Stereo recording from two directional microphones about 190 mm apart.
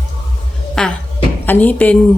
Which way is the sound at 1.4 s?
10° left (ahead or behind).